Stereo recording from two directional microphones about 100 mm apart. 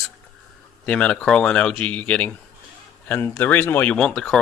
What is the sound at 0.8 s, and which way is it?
Speech, 10° left (ahead or behind).